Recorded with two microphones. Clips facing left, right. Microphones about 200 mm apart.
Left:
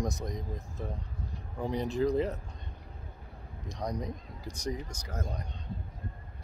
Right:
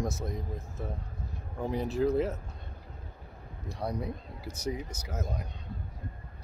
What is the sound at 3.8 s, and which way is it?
Speech, 5° right (ahead or behind).